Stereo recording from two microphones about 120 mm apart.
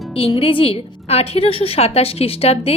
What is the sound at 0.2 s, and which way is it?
A woman's voice, 50° left (ahead or behind).